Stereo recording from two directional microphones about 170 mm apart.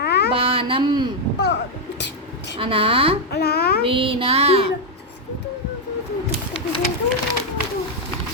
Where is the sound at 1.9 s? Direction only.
90° left.